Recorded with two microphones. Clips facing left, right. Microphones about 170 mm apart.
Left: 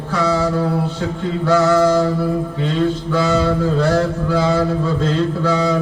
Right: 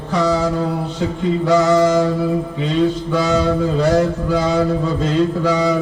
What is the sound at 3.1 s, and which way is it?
Mantra, 15° right (ahead or behind).